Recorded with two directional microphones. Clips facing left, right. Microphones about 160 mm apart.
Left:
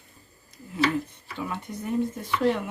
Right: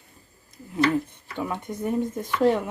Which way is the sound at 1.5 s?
50° right (ahead or behind).